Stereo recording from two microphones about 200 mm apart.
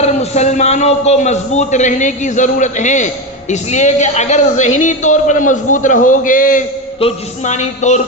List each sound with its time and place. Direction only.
0.0 s speech: 35° left (ahead or behind)